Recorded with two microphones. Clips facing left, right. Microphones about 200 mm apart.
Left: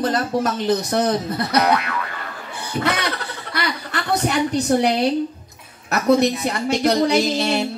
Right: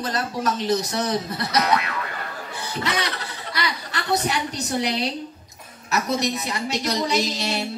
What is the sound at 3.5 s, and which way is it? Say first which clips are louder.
A woman's voice: left 3 dB; 55° left (ahead or behind).